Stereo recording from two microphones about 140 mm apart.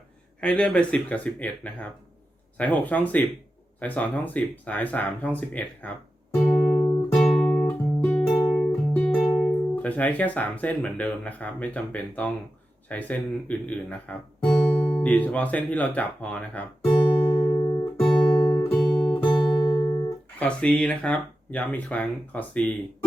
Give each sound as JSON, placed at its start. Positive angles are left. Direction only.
{"t": 0.4, "sound": "speech", "side_deg": 10}
{"t": 6.3, "sound": "music", "side_deg": 25}
{"t": 7.3, "sound": "music", "side_deg": 5}
{"t": 8.3, "sound": "music", "side_deg": 25}
{"t": 8.5, "sound": "speech", "side_deg": 10}
{"t": 16.9, "sound": "music", "side_deg": 35}
{"t": 20.4, "sound": "speech", "side_deg": 10}